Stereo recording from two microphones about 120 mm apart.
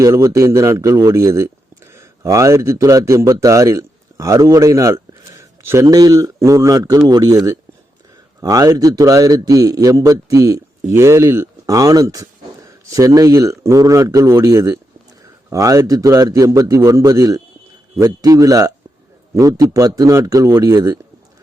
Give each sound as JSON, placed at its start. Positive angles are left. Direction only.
{"t": 0.0, "sound": "a man's voice", "side_deg": -25}
{"t": 5.4, "sound": "a sound", "side_deg": -25}
{"t": 5.8, "sound": "a man's voice", "side_deg": -30}